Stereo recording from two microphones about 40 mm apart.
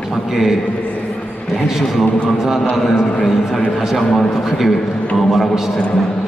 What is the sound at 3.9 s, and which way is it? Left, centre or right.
A man's voice, centre.